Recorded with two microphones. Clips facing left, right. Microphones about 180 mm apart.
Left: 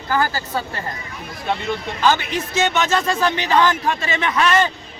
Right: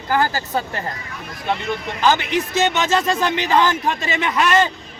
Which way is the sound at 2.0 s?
20° right (ahead or behind).